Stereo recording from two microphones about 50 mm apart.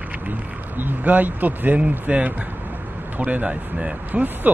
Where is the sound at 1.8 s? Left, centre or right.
Right.